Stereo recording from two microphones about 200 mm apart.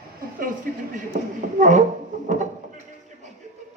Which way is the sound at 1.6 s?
35° right (ahead or behind).